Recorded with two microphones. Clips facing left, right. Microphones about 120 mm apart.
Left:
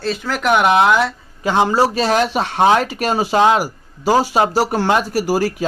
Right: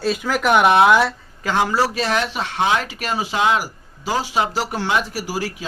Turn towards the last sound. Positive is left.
turn(degrees=45)  # may be behind; listen again after turning